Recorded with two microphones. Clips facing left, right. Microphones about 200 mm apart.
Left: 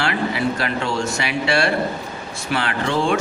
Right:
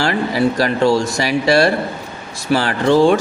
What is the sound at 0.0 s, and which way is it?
Speech, 40° right (ahead or behind).